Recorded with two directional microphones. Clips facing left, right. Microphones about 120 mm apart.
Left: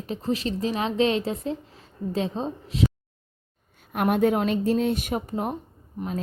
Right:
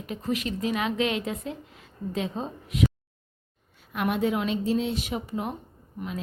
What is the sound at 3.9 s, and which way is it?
A woman's voice, 50° left (ahead or behind).